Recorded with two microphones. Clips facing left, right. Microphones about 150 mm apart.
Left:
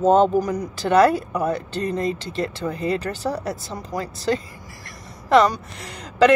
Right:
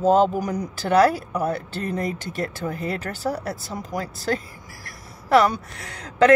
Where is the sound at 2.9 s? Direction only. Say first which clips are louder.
Left 4 dB; 5° right (ahead or behind).